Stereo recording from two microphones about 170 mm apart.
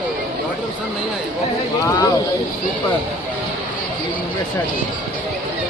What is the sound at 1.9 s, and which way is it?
Speech, 20° left (ahead or behind).